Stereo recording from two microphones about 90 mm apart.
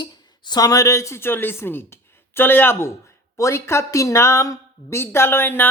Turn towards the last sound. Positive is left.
turn(degrees=25)  # may be behind; listen again after turning